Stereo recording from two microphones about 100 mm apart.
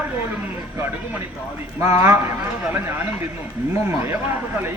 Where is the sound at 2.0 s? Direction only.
30° right (ahead or behind).